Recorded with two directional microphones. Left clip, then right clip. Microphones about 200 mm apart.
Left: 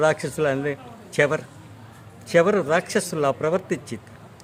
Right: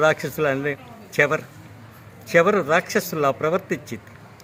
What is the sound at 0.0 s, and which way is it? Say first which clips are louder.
A man's voice: right 1 dB; 10° left (ahead or behind).